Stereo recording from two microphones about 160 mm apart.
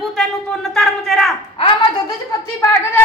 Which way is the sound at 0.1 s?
Centre (ahead or behind).